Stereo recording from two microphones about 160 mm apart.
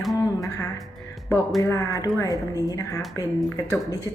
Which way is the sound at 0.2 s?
20° left (ahead or behind).